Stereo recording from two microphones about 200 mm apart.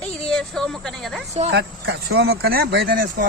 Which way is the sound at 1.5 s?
55° right (ahead or behind).